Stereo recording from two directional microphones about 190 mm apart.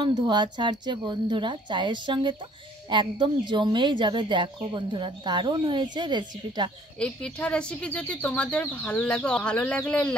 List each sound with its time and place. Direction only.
0.0 s speech: 25° right (ahead or behind)
7.0 s speech: 5° left (ahead or behind)